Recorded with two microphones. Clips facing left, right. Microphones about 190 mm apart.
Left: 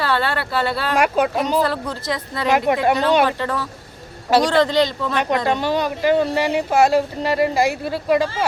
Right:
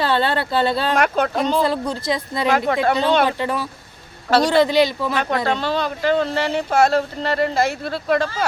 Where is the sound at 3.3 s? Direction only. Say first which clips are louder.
Right 1 dB; 15° right (ahead or behind).